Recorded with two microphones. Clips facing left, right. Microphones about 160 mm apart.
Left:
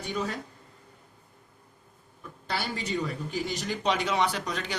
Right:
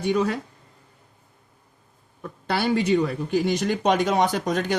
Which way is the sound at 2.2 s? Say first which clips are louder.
Right 8 dB; 60° right (ahead or behind).